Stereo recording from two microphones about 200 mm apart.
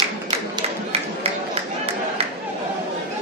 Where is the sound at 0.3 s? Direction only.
30° right (ahead or behind).